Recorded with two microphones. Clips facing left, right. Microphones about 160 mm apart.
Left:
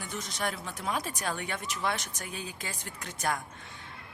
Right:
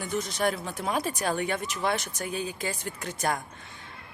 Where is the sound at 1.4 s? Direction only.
50° right (ahead or behind).